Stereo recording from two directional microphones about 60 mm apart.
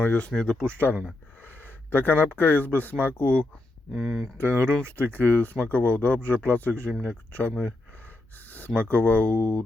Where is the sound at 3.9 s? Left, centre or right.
Centre.